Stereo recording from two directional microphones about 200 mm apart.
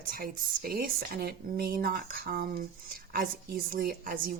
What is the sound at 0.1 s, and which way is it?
A woman's voice, 45° right (ahead or behind).